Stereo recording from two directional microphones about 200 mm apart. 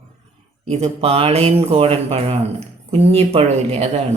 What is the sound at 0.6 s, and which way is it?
Speech, 30° right (ahead or behind).